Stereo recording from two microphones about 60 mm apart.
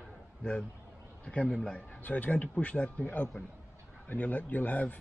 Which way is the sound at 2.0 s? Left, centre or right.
Left.